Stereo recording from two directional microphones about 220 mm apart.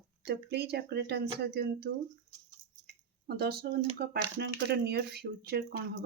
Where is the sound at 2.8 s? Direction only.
45° right (ahead or behind).